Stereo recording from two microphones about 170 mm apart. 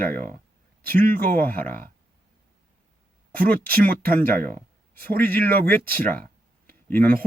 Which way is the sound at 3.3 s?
10° left (ahead or behind).